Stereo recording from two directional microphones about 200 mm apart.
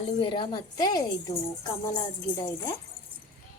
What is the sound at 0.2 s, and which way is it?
Speech, 25° left (ahead or behind).